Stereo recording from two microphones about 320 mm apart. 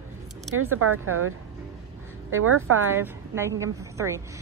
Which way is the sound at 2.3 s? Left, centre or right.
Right.